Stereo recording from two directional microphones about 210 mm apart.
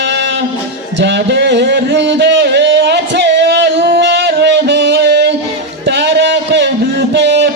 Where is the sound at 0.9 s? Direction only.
55° right (ahead or behind).